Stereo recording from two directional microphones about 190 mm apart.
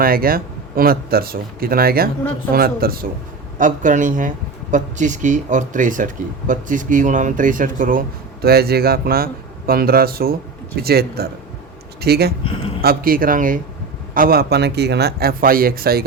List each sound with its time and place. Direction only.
0.0 s a man's voice: 50° right (ahead or behind)